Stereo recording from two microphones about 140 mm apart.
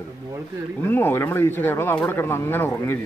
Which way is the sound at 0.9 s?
15° left (ahead or behind).